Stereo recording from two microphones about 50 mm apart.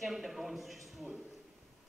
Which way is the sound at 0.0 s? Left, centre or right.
Centre.